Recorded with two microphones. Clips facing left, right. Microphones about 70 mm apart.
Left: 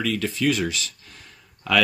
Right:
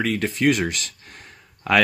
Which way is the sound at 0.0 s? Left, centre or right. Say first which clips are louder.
Right 3 dB; right.